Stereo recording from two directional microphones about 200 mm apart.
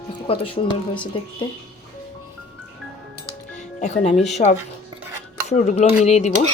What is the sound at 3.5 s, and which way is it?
Music, 35° left (ahead or behind).